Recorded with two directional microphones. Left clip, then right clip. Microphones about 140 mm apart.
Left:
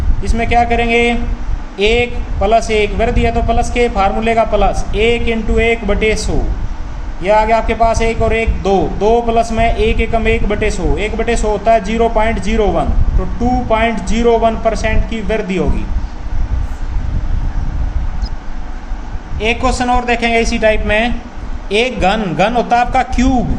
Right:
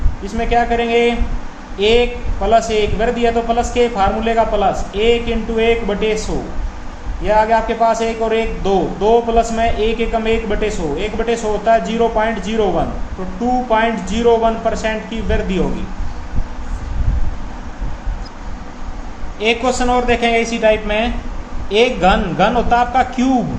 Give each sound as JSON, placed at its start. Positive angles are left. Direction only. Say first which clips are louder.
{"t": 0.3, "sound": "a man's voice", "louder": "left 3 dB", "side_deg": 40}
{"t": 7.2, "sound": "a man's voice", "louder": "left 2 dB", "side_deg": 40}
{"t": 19.4, "sound": "a man's voice", "louder": "left 1 dB", "side_deg": 30}